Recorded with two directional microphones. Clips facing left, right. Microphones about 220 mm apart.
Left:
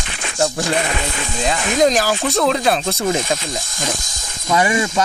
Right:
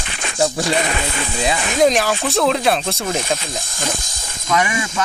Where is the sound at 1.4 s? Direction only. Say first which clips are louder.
Even; 5° right (ahead or behind).